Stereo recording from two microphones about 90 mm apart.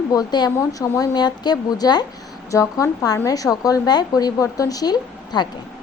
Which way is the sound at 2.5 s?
35° left (ahead or behind).